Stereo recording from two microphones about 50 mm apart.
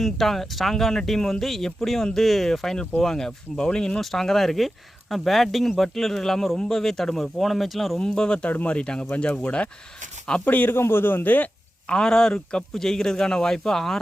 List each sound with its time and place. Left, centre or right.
0.0 s a man's voice: centre
4.0 s speech: centre
7.9 s a man's voice: centre
10.4 s speech: left
10.8 s a man's voice: left
11.9 s a man's voice: centre